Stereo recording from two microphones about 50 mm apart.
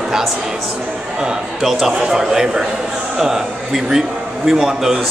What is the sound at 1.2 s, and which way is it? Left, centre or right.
Speech, centre.